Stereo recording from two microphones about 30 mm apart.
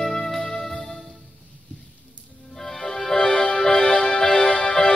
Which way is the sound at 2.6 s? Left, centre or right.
Centre.